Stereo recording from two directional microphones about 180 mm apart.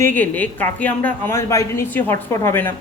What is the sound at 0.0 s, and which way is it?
A woman's voice, 10° left (ahead or behind).